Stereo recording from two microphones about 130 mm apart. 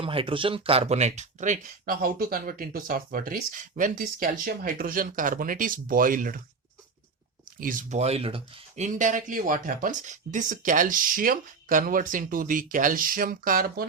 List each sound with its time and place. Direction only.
0.0 s speech: 45° right (ahead or behind); by 6.4 s 90° right
7.6 s speech: 90° right; by 8.8 s 50° right (ahead or behind)
8.8 s speech: 75° right (ahead or behind)